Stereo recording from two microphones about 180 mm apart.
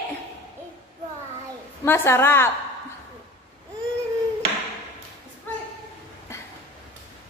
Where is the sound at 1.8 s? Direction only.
15° left (ahead or behind).